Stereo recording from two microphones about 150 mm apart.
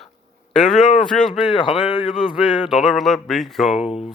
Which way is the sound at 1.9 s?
35° left (ahead or behind).